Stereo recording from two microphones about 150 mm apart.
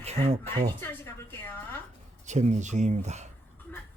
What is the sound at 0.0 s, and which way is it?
Speech, 45° right (ahead or behind).